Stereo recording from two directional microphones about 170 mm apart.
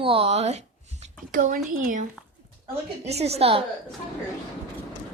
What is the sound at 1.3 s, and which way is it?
Speech, 55° right (ahead or behind).